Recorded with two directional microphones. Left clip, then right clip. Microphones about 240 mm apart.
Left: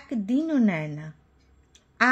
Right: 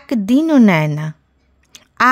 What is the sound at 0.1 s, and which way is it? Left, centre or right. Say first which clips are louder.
Speech: right 12 dB; right.